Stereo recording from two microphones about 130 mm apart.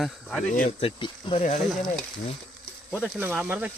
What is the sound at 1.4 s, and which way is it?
Speech, 75° left (ahead or behind).